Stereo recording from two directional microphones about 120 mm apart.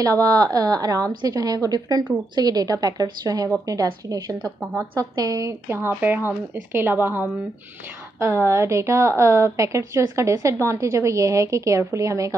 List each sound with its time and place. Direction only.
0.0 s a woman's voice: 30° right (ahead or behind)